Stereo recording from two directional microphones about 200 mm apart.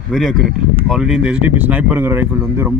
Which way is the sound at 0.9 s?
Centre (ahead or behind).